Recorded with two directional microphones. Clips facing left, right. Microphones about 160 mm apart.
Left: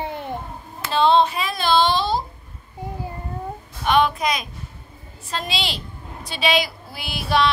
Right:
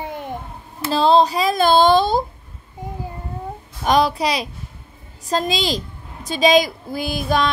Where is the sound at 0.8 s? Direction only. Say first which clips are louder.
Right 2 dB; 35° right (ahead or behind).